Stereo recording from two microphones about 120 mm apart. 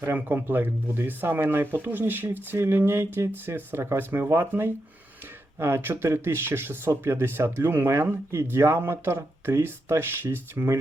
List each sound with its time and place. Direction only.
0.0 s speech: 20° right (ahead or behind)